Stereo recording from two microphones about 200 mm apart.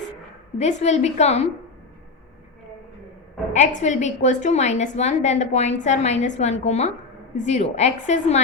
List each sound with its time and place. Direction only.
0.6 s a woman's voice: 35° left (ahead or behind)
3.5 s a woman's voice: 35° left (ahead or behind)